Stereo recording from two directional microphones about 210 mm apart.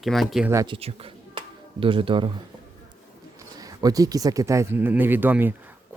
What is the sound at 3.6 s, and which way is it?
Speech, 15° right (ahead or behind).